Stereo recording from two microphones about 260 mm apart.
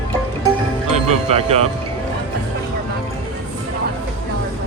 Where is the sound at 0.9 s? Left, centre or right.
Right.